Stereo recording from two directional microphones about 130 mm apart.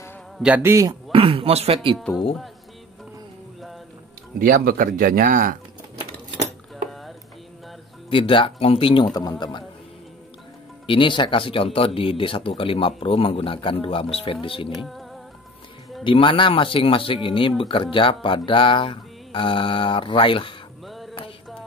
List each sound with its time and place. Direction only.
0.6 s a man's voice: 25° right (ahead or behind)
1.1 s speech: 45° right (ahead or behind)
4.4 s speech: 90° right
6.9 s a sound: centre (ahead or behind)
8.1 s speech: 40° left (ahead or behind)
9.0 s speech: 30° left (ahead or behind)
10.9 s speech: 40° left (ahead or behind)
14.7 s music: centre (ahead or behind)
16.0 s speech: 40° left (ahead or behind)
20.8 s music: centre (ahead or behind)